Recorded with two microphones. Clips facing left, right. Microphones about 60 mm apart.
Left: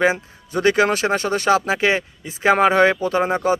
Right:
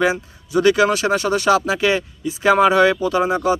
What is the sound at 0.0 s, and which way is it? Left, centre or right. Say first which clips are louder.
Speech: even; left.